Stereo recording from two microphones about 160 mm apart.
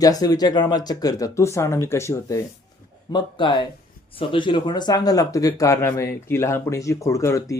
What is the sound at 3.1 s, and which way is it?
Speech, 30° left (ahead or behind).